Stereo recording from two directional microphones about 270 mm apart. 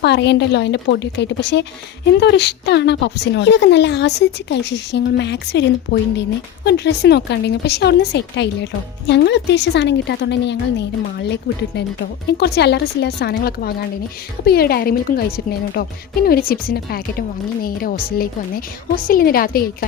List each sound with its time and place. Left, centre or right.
0.0 s a woman's voice: left
12.4 s a woman's voice: left